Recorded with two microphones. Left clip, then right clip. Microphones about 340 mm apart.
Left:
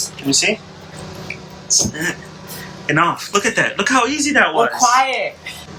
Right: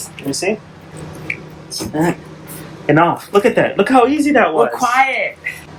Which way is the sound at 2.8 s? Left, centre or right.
Centre.